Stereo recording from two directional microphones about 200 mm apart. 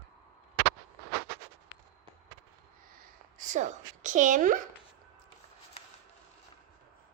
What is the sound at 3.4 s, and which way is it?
A woman's voice, 35° right (ahead or behind).